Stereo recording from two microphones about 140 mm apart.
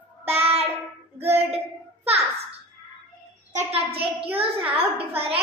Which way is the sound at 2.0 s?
45° right (ahead or behind).